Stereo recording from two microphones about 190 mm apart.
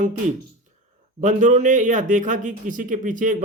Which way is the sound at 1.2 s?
40° right (ahead or behind).